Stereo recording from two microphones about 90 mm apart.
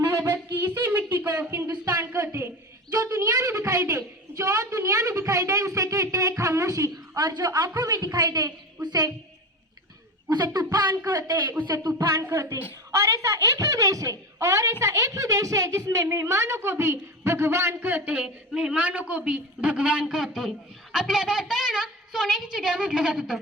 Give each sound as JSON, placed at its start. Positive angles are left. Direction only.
{"t": 0.0, "sound": "a sound", "side_deg": -30}
{"t": 10.2, "sound": "a child's voice", "side_deg": -50}
{"t": 11.7, "sound": "a woman's voice", "side_deg": -35}